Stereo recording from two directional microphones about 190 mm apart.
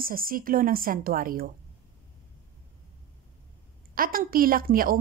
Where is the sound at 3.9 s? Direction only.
50° right (ahead or behind).